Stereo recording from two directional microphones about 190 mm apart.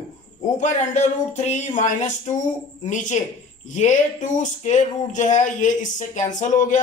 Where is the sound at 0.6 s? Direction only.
35° left (ahead or behind).